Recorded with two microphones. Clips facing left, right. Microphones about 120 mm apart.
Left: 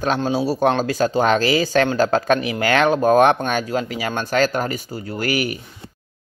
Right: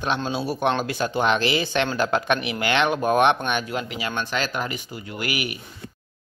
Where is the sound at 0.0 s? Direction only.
40° left (ahead or behind).